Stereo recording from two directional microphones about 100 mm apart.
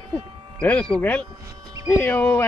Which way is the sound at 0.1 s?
10° left (ahead or behind).